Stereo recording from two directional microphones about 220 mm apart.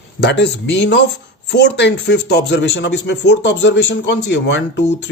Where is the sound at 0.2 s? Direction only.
50° left (ahead or behind).